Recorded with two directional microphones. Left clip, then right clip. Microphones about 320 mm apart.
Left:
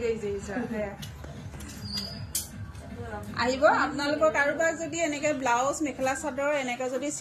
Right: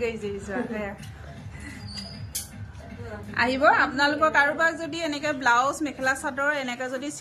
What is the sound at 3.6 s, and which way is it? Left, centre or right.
Speech, right.